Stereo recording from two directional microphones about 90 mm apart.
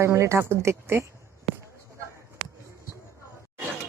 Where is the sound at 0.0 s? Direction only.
30° right (ahead or behind).